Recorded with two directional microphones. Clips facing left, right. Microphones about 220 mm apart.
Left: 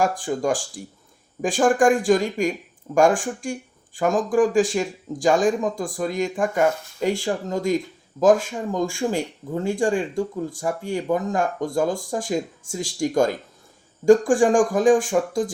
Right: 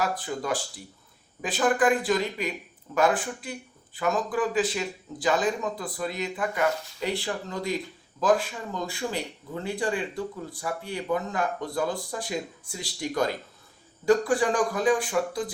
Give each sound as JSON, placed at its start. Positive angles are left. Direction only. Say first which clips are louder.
{"t": 0.0, "sound": "speech", "louder": "left 7 dB", "side_deg": 45}